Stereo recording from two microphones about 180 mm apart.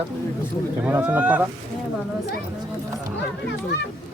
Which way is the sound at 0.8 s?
10° right (ahead or behind).